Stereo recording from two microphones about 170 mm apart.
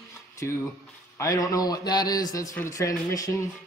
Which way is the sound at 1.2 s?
20° left (ahead or behind).